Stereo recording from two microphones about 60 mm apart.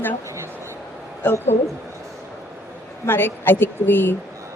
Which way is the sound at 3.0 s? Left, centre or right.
Left.